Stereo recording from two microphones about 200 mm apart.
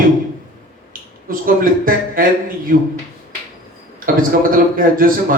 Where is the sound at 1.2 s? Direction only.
45° right (ahead or behind).